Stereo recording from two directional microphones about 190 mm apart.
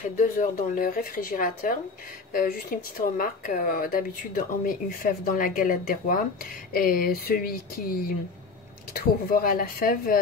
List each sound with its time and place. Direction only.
0.2 s speech: 45° left (ahead or behind)